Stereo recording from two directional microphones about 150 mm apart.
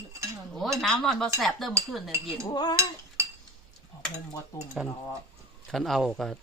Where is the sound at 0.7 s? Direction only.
Centre (ahead or behind).